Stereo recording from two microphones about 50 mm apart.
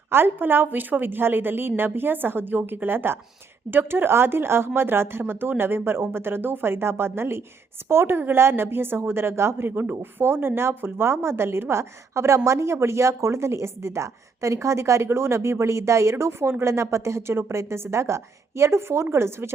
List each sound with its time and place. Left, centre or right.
0.1 s a woman's voice: right
16.7 s a woman's voice: right